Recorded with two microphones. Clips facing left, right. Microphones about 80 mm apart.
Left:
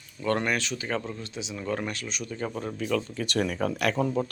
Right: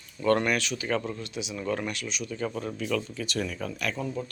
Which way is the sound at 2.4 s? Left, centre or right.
Left.